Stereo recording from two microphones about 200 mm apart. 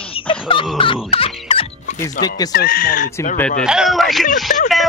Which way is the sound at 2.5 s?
45° left (ahead or behind).